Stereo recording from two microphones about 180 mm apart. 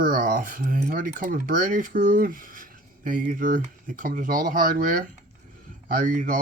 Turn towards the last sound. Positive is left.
turn(degrees=-45)  # may be behind; listen again after turning